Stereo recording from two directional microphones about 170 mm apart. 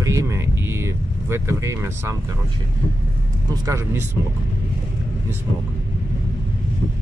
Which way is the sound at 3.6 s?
15° right (ahead or behind).